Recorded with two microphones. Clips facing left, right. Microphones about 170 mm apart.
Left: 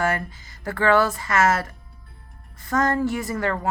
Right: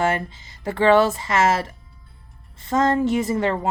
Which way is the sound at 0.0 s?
25° right (ahead or behind).